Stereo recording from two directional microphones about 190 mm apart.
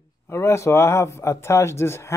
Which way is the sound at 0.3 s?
15° left (ahead or behind).